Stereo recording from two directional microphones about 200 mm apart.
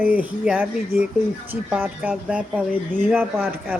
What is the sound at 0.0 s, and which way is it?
Speech, 5° right (ahead or behind).